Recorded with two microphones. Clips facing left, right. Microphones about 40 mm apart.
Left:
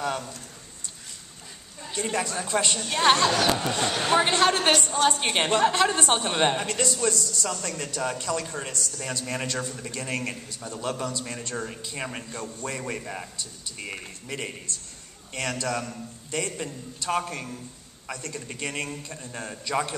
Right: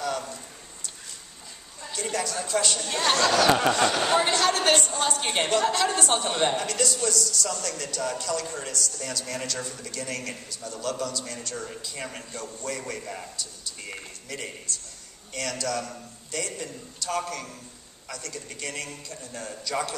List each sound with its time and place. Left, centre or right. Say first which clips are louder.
1.9 s a man's voice: left 2 dB; left
13.7 s a man's voice: left 5 dB; left